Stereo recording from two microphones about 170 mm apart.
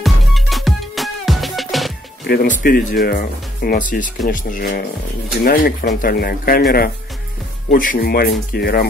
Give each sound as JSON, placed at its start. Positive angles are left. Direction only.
{"t": 0.0, "sound": "music", "side_deg": 0}
{"t": 2.2, "sound": "speech", "side_deg": 65}